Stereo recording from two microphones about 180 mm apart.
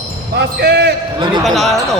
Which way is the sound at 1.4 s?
Centre (ahead or behind).